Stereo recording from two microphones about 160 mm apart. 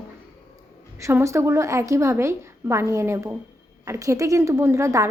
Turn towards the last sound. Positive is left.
turn(degrees=-20)  # may be behind; listen again after turning